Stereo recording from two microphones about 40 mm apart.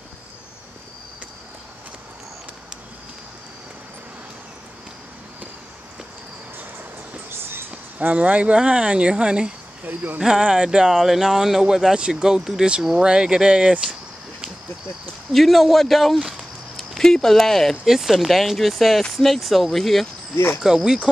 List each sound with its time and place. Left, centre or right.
8.0 s speech: right
15.3 s speech: centre
16.3 s a sound: centre
17.0 s speech: centre
17.8 s speech: centre
20.6 s speech: centre